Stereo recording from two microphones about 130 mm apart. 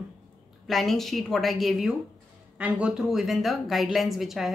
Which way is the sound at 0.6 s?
Centre (ahead or behind).